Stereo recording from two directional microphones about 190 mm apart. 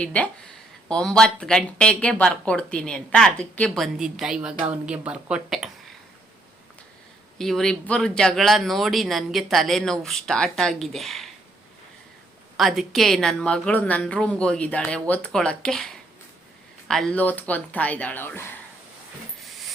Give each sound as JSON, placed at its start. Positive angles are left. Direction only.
{"t": 0.0, "sound": "speech", "side_deg": 5}
{"t": 7.3, "sound": "speech", "side_deg": 0}
{"t": 12.5, "sound": "speech", "side_deg": 0}
{"t": 19.5, "sound": "hiss", "side_deg": 0}